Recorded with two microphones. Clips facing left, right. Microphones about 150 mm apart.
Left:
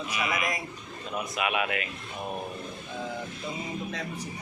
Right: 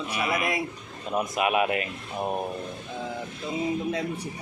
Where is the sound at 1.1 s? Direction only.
40° right (ahead or behind).